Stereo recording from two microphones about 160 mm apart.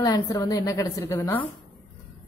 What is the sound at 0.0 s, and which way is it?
A woman's voice, 25° left (ahead or behind).